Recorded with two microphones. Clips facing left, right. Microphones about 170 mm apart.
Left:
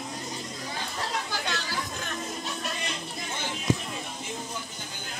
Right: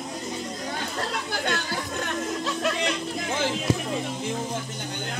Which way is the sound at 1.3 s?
55° right (ahead or behind).